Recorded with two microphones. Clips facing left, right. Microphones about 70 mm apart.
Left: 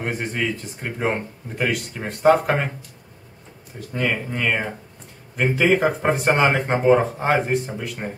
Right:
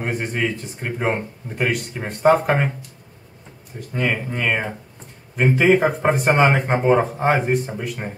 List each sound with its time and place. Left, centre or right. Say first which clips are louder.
0.0 s speech: right 2 dB; centre
3.9 s speech: right 1 dB; centre